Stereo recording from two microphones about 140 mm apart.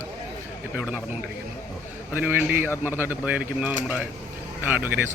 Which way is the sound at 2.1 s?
15° right (ahead or behind).